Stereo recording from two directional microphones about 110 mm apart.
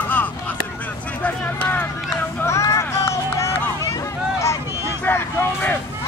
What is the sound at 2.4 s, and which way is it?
Run, 25° left (ahead or behind).